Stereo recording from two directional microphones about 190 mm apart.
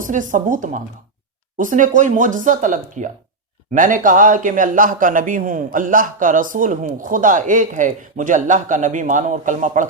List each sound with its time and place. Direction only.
0.0 s a man's voice: 45° right (ahead or behind)